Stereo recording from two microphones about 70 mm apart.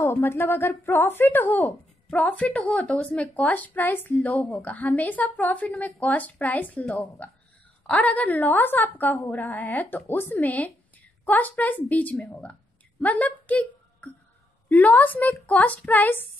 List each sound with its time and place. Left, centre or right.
0.0 s speech: left
2.0 s a woman's voice: centre